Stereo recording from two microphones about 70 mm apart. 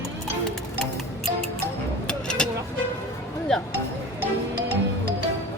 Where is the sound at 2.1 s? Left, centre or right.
Centre.